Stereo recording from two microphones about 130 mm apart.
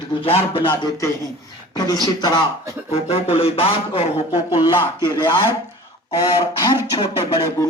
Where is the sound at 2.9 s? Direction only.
50° left (ahead or behind).